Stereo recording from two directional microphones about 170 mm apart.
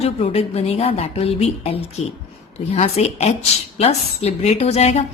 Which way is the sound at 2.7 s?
40° left (ahead or behind).